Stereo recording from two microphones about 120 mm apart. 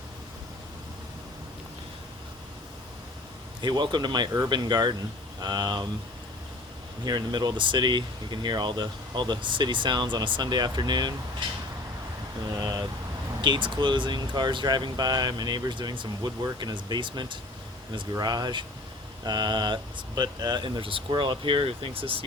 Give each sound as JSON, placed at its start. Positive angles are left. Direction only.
{"t": 3.6, "sound": "speech", "side_deg": -40}
{"t": 7.0, "sound": "speech", "side_deg": -35}
{"t": 13.4, "sound": "speech", "side_deg": -40}